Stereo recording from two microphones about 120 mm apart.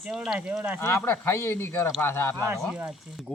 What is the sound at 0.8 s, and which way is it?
Speech, 20° left (ahead or behind).